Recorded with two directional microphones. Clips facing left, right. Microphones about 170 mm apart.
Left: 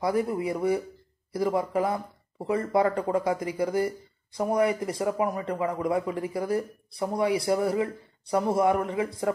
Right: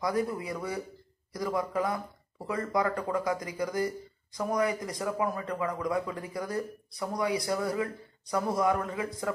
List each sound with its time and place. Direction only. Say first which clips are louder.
0.0 s speech: left 4 dB; 30° left (ahead or behind)